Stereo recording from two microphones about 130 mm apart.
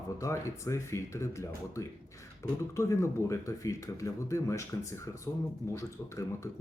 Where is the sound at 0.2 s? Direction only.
20° left (ahead or behind).